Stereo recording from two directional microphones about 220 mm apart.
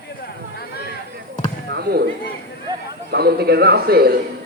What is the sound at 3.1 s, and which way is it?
A man's voice, 45° right (ahead or behind).